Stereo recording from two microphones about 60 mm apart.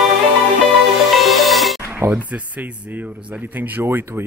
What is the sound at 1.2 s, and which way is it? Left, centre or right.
Music, centre.